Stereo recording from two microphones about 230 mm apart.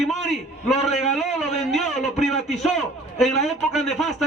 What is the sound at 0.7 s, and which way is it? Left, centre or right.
Speech, left.